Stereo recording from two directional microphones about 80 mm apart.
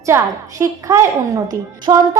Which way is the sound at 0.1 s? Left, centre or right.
Right.